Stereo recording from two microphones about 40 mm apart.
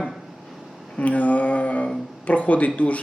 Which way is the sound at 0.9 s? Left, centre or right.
Left.